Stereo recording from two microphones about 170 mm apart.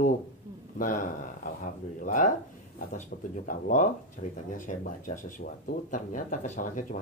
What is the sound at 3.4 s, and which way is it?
Speech, 50° left (ahead or behind).